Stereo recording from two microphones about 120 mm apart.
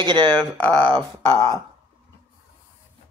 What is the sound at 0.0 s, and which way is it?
Speech, 40° right (ahead or behind).